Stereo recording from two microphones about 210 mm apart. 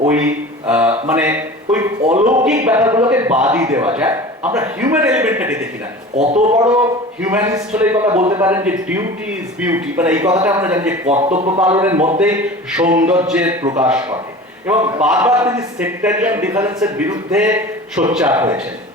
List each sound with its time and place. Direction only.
0.1 s a man's voice: 5° right (ahead or behind)
2.0 s speech: 35° right (ahead or behind)
2.3 s a man's voice: 10° right (ahead or behind)
6.1 s speech: 35° right (ahead or behind)
6.7 s a man's voice: 5° right (ahead or behind)
10.2 s a man's voice: 15° right (ahead or behind)
11.1 s speech: 30° right (ahead or behind)
11.6 s a man's voice: 10° right (ahead or behind)
11.9 s speech: 30° right (ahead or behind)
12.2 s a man's voice: 5° right (ahead or behind)